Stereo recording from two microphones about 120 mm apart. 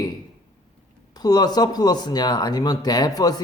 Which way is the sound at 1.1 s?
35° left (ahead or behind).